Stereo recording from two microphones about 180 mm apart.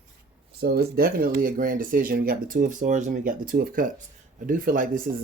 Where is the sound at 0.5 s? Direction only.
60° right (ahead or behind).